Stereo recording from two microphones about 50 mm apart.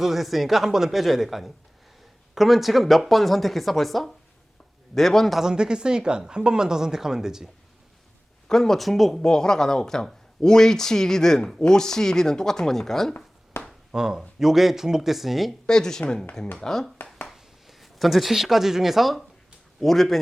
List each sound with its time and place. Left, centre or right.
0.0 s speech: centre
5.4 s speech: centre
8.4 s speech: centre
9.2 s speech: centre
13.5 s a sound: left
13.9 s speech: centre
15.6 s speech: centre
17.2 s speech: centre